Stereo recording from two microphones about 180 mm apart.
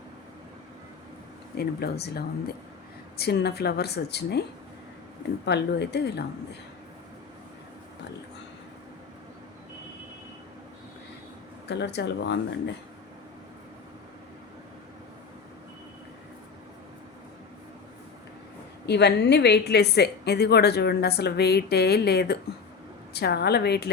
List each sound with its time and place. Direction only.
1.5 s a woman's voice: 60° left (ahead or behind)
5.5 s a woman's voice: 70° left (ahead or behind)
11.7 s a woman's voice: 70° left (ahead or behind)
18.9 s a woman's voice: 70° left (ahead or behind)